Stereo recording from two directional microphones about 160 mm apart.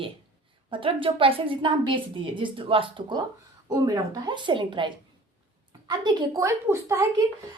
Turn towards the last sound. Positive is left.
turn(degrees=-20)  # may be behind; listen again after turning